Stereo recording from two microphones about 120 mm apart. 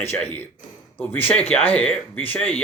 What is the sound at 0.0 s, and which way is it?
Speech, 20° left (ahead or behind).